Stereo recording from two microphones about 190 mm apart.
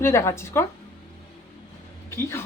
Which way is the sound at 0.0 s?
15° left (ahead or behind).